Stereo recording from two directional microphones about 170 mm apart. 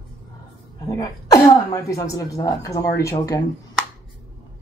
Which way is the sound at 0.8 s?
20° left (ahead or behind).